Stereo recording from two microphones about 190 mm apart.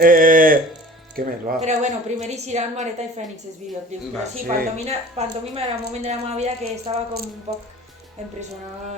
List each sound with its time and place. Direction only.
0.0 s a woman's voice: 45° right (ahead or behind)
4.4 s a woman's voice: 40° right (ahead or behind)